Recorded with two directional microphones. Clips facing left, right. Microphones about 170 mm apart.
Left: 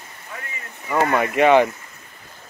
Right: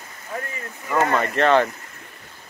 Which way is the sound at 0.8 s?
10° left (ahead or behind).